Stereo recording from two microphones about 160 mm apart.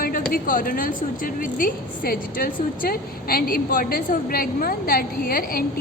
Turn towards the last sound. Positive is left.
turn(degrees=65)  # may be behind; listen again after turning